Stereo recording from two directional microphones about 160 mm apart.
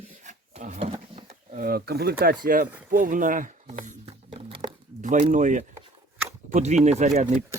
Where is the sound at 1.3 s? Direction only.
60° right (ahead or behind).